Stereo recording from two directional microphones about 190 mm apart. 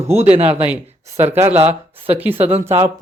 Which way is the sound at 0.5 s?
10° right (ahead or behind).